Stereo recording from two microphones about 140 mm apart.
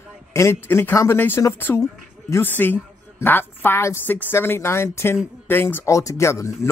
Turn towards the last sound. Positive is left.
turn(degrees=20)  # may be behind; listen again after turning